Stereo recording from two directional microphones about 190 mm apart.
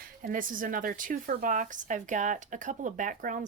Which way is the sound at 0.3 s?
45° right (ahead or behind).